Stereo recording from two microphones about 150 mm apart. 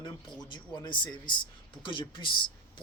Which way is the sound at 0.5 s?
30° left (ahead or behind).